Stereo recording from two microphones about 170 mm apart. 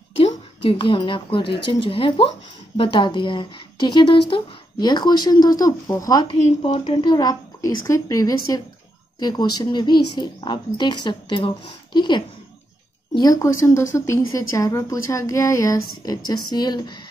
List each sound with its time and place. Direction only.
0.2 s a woman's voice: 35° left (ahead or behind)
6.4 s a woman's voice: 40° left (ahead or behind)